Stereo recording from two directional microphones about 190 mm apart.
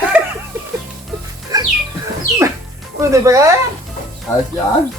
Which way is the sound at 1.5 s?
20° right (ahead or behind).